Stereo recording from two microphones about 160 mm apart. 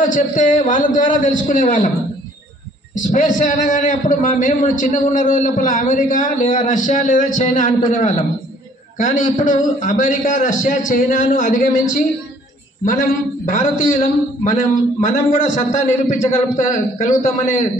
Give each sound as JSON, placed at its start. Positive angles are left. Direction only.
{"t": 0.1, "sound": "a man's voice", "side_deg": 55}
{"t": 2.9, "sound": "a man's voice", "side_deg": 55}
{"t": 13.5, "sound": "a man's voice", "side_deg": 55}